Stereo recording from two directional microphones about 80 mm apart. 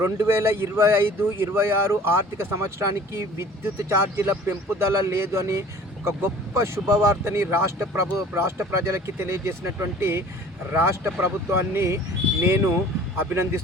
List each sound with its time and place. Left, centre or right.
0.0 s speech: right